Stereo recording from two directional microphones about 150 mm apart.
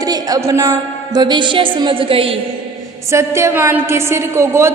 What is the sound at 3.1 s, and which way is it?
A woman's voice, 20° right (ahead or behind).